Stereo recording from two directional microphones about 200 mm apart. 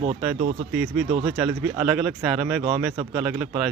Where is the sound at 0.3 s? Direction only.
40° right (ahead or behind).